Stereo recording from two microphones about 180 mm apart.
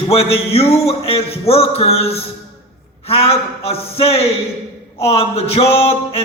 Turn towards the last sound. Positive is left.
turn(degrees=35)  # may be behind; listen again after turning